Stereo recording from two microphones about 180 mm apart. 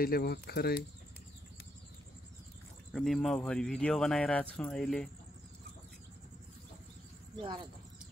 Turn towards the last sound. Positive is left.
turn(degrees=-30)  # may be behind; listen again after turning